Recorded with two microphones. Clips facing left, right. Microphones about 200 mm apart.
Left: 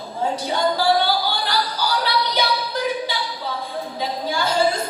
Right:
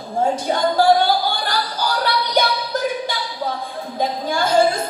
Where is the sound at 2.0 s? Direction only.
50° right (ahead or behind).